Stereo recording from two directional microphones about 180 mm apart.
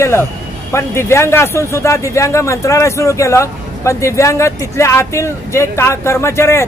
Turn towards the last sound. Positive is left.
turn(degrees=15)  # may be behind; listen again after turning